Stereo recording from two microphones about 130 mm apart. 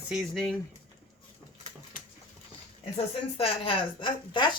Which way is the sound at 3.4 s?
45° left (ahead or behind).